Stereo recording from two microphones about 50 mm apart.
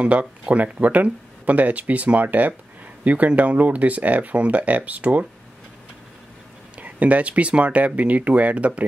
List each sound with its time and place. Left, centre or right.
0.0 s speech: right
6.8 s speech: right